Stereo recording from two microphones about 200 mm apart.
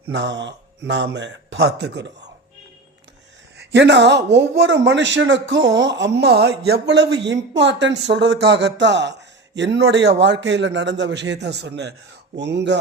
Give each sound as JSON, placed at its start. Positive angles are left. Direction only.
{"t": 0.0, "sound": "a man's voice", "side_deg": -70}
{"t": 3.6, "sound": "a man's voice", "side_deg": -60}